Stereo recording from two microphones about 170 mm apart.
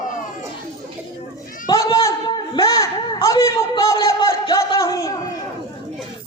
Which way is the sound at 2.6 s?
20° left (ahead or behind).